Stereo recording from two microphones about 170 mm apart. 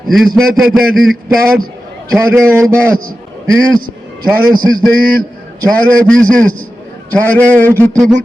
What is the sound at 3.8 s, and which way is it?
Speech, 60° right (ahead or behind).